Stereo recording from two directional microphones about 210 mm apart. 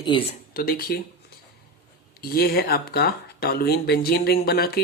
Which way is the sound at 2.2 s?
45° left (ahead or behind).